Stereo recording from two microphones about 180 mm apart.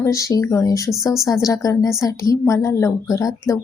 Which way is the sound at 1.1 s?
Centre (ahead or behind).